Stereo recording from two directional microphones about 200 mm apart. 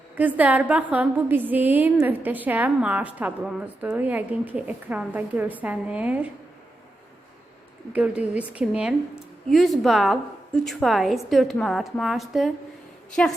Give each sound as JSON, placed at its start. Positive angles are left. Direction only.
{"t": 0.2, "sound": "a woman's voice", "side_deg": -10}
{"t": 7.9, "sound": "a woman's voice", "side_deg": -5}